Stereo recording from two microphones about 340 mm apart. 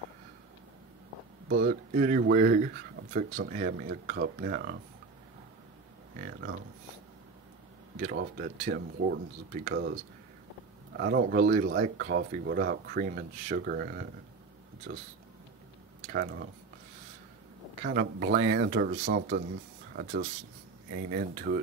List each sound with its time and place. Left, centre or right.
1.6 s speech: right
6.1 s speech: right
8.0 s speech: right
16.1 s speech: right
17.8 s speech: right